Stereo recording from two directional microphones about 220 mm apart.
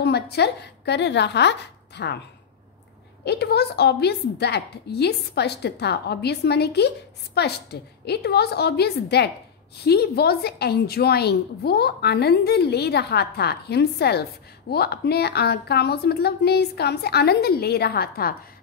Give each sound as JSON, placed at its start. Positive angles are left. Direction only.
{"t": 0.0, "sound": "speech", "side_deg": 50}
{"t": 3.3, "sound": "a woman's voice", "side_deg": 50}